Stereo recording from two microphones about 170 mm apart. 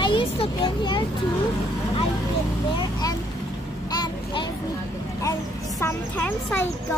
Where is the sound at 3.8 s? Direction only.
25° left (ahead or behind).